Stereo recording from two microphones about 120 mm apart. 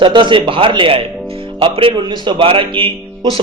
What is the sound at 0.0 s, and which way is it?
Speech, 40° right (ahead or behind).